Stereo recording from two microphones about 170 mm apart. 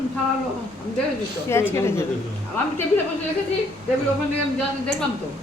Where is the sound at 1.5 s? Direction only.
15° left (ahead or behind).